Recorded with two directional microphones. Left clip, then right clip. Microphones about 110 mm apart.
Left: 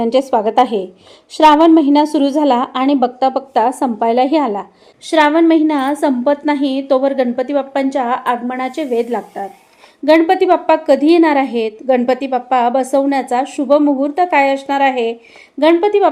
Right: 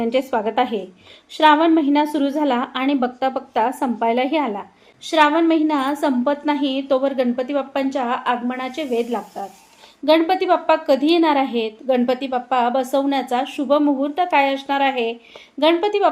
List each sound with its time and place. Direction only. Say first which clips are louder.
0.0 s a woman's voice: left 6 dB; 30° left (ahead or behind)